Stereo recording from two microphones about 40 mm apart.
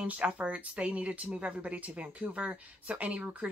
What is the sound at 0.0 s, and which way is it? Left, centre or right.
A woman's voice, right.